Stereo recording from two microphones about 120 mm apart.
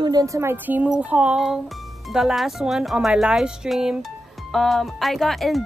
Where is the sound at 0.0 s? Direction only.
30° right (ahead or behind).